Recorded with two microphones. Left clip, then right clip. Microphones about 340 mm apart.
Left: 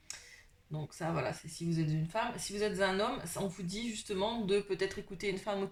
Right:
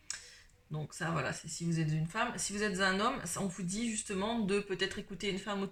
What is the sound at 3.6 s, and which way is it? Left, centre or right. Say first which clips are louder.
Speech: right 1 dB; centre.